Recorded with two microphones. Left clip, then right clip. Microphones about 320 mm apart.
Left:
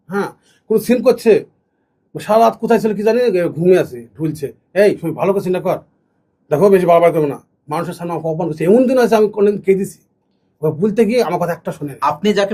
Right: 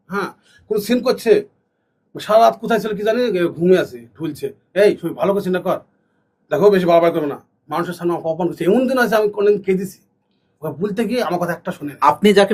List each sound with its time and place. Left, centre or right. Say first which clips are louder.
0.1 s a man's voice: left 3 dB; left
11.9 s speech: right 3 dB; right